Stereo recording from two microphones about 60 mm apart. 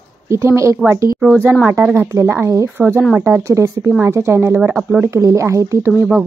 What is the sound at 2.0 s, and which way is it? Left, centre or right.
Speech, right.